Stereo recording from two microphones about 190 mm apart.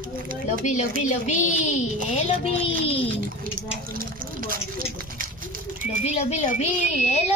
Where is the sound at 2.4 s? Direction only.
30° left (ahead or behind).